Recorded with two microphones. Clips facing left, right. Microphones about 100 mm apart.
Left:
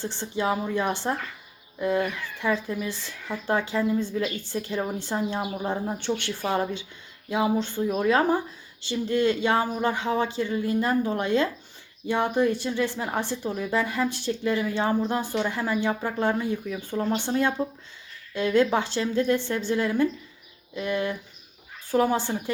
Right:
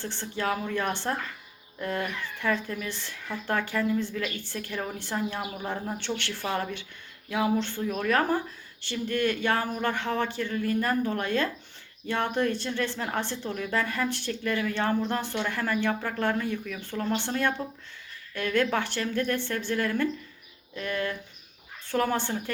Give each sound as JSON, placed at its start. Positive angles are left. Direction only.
{"t": 0.0, "sound": "speech", "side_deg": 15}